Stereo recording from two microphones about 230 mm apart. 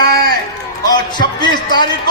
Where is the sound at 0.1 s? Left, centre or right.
Right.